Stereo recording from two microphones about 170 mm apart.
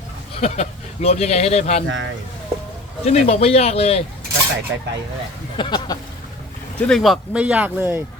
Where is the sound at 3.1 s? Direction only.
40° left (ahead or behind).